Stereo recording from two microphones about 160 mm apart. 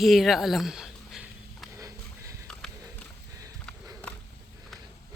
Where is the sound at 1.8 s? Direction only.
20° right (ahead or behind).